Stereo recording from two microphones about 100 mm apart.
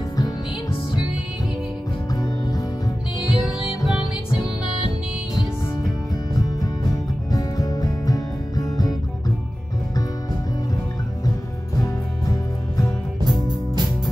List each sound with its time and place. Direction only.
2.1 s music: 40° left (ahead or behind)
3.3 s music: 5° right (ahead or behind)
7.2 s music: 40° left (ahead or behind)
12.3 s music: 35° left (ahead or behind)
13.4 s music: 45° right (ahead or behind)